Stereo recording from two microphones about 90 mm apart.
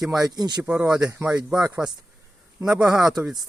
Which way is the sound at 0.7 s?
10° right (ahead or behind).